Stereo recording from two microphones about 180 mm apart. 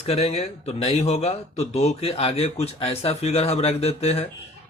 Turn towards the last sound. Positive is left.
turn(degrees=35)  # may be behind; listen again after turning